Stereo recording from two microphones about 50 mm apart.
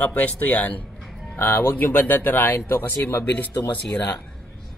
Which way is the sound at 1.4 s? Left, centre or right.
Left.